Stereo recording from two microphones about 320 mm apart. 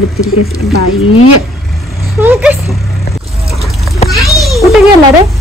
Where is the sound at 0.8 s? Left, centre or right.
Left.